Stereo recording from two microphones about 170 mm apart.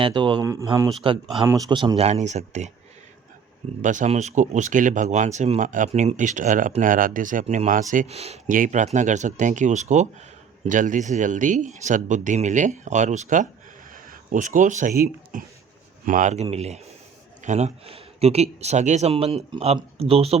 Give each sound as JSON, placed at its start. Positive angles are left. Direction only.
{"t": 0.0, "sound": "speech", "side_deg": -30}
{"t": 3.8, "sound": "speech", "side_deg": -45}
{"t": 8.4, "sound": "speech", "side_deg": -50}